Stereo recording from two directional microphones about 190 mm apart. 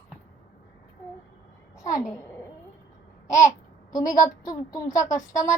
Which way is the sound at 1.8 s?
20° left (ahead or behind).